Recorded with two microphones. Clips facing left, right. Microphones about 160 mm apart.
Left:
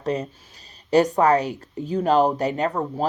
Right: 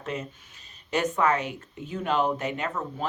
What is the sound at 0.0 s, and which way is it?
Speech, 35° left (ahead or behind).